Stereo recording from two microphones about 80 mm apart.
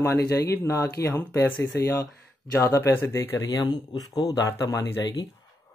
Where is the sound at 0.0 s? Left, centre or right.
Left.